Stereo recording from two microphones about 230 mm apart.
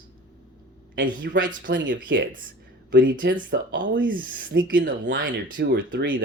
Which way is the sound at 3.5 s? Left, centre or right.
Right.